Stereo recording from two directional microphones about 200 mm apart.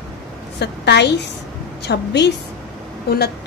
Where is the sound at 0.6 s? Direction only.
55° left (ahead or behind).